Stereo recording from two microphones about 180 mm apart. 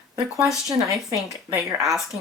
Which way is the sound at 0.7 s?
15° right (ahead or behind).